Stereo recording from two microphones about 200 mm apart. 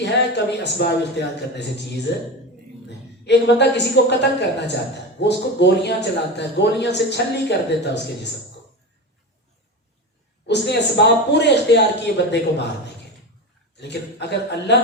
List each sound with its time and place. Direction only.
0.0 s a man's voice: 60° left (ahead or behind)
3.2 s a man's voice: 60° left (ahead or behind)
10.4 s a man's voice: 60° left (ahead or behind)
13.7 s a man's voice: 60° left (ahead or behind)